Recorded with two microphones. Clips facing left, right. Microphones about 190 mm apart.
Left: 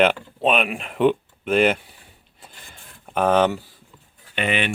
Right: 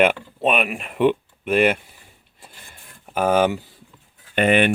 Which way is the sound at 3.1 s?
5° right (ahead or behind).